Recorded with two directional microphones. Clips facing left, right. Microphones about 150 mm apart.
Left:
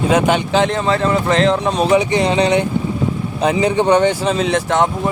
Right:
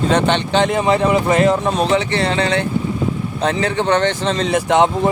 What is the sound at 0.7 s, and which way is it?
Speech, 15° right (ahead or behind).